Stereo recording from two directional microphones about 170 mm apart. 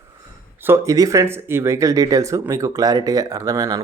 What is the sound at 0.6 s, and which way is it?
Speech, 15° right (ahead or behind).